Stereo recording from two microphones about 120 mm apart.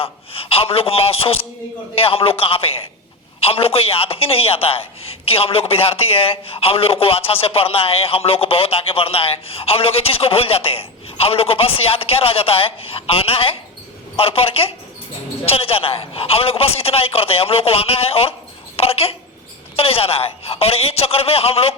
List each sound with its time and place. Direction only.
0.0 s a man's voice: 55° left (ahead or behind)